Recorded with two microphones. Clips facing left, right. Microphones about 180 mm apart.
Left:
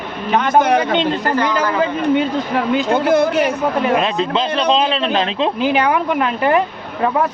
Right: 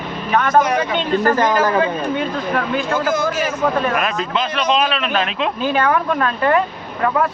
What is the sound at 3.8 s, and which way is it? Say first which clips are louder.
Speech: left 4 dB; 20° left (ahead or behind).